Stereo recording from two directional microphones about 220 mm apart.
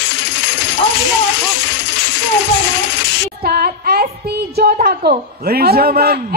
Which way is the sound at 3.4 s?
45° right (ahead or behind).